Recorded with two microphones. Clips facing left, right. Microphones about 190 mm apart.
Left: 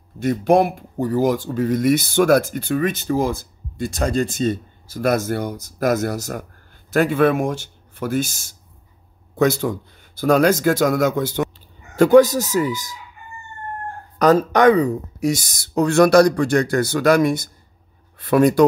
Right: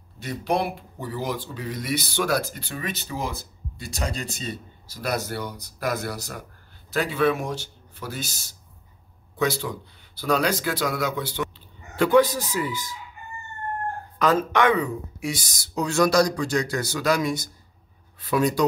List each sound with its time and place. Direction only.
0.2 s speech: 50° left (ahead or behind)
14.1 s speech: 40° left (ahead or behind)